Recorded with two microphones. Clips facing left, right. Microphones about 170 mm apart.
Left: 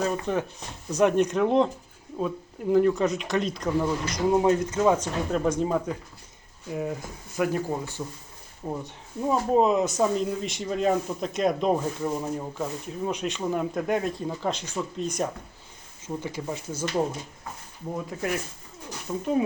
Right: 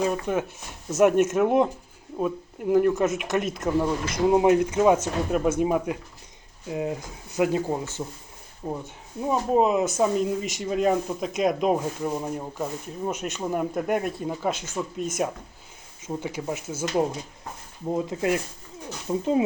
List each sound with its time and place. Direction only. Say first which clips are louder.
0.0 s speech: right 2 dB; 10° right (ahead or behind)
8.6 s speech: right 1 dB; centre (ahead or behind)
17.9 s speech: right 5 dB; 20° right (ahead or behind)